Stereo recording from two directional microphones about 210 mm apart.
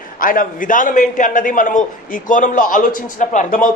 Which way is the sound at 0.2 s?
40° left (ahead or behind).